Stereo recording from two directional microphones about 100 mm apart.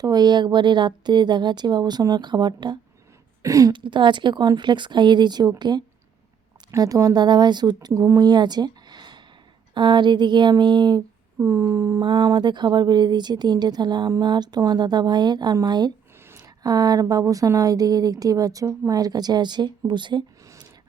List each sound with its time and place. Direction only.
0.0 s a woman's voice: 45° right (ahead or behind)
3.4 s speech: 35° right (ahead or behind)
3.7 s a woman's voice: 55° right (ahead or behind)
11.3 s speech: 30° right (ahead or behind)
12.0 s a woman's voice: 45° right (ahead or behind)